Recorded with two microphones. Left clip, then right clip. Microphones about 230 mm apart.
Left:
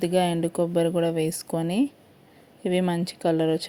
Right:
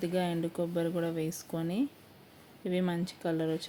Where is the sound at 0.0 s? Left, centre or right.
Left.